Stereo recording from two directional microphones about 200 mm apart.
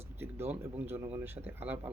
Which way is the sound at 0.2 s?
10° right (ahead or behind).